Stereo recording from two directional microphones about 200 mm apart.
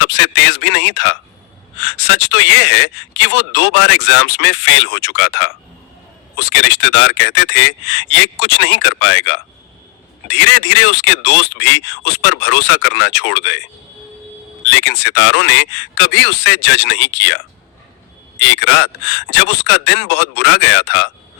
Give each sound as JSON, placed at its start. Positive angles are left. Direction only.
{"t": 0.0, "sound": "speech", "side_deg": 60}
{"t": 14.7, "sound": "speech", "side_deg": 60}